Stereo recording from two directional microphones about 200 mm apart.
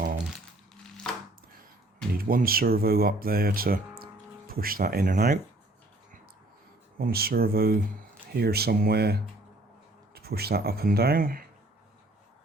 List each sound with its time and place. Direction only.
2.1 s speech: 45° right (ahead or behind)
7.0 s speech: 50° right (ahead or behind)